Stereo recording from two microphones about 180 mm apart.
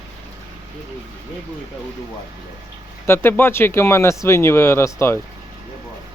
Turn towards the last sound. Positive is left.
turn(degrees=15)  # may be behind; listen again after turning